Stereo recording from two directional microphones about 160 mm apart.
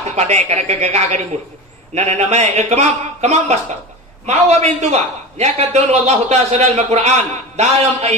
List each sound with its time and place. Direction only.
0.1 s a man's voice: 45° right (ahead or behind)